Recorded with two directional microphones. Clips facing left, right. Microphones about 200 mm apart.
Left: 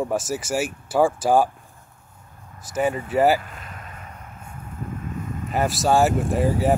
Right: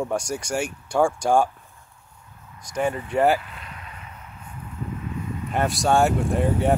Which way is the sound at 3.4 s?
45° left (ahead or behind).